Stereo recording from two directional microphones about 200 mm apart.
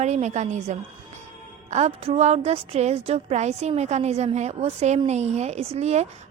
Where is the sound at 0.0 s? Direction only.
35° right (ahead or behind).